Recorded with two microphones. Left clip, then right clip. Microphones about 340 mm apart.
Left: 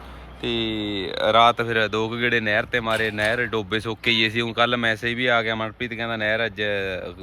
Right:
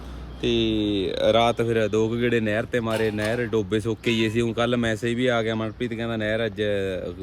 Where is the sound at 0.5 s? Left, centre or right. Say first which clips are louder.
Right 3 dB; centre.